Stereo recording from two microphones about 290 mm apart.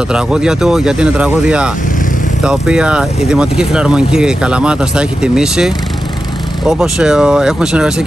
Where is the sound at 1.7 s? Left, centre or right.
Left.